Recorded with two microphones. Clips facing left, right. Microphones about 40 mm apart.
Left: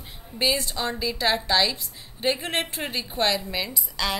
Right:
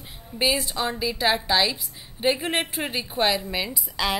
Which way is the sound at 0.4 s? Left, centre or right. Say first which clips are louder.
Right 1 dB; centre.